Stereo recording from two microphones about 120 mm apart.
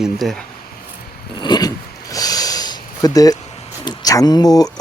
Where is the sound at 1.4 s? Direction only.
35° left (ahead or behind).